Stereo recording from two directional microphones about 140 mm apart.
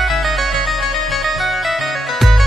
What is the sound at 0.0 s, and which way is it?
Music, centre (ahead or behind).